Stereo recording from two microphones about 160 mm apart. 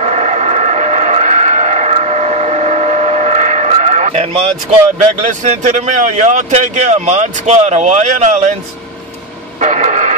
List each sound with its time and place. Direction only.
0.0 s vehicle: 45° right (ahead or behind)
5.2 s speech: 50° right (ahead or behind)
9.6 s radio: 50° right (ahead or behind)